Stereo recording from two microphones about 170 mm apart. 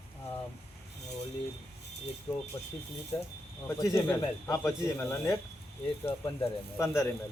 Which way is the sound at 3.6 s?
20° left (ahead or behind).